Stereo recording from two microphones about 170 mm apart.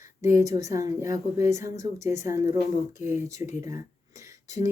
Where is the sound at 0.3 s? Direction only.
20° right (ahead or behind).